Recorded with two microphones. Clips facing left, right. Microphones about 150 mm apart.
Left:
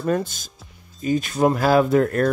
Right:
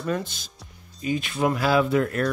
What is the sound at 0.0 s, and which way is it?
Speech, 45° left (ahead or behind).